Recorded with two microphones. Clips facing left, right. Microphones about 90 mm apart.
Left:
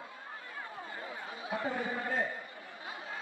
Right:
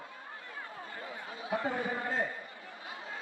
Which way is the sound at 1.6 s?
20° right (ahead or behind).